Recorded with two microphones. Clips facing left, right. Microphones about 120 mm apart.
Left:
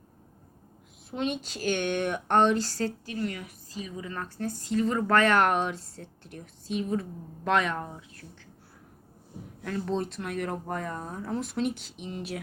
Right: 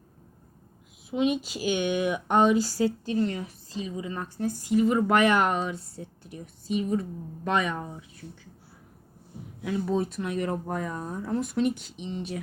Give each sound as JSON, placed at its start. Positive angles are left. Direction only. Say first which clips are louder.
{"t": 1.1, "sound": "a woman's voice", "louder": "right 5 dB", "side_deg": -5}
{"t": 3.1, "sound": "a woman's voice", "louder": "right 6 dB", "side_deg": -25}
{"t": 5.6, "sound": "speech", "louder": "even", "side_deg": -5}
{"t": 9.6, "sound": "speech", "louder": "right 3 dB", "side_deg": -5}